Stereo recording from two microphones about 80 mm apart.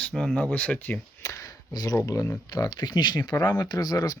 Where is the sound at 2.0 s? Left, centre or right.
Left.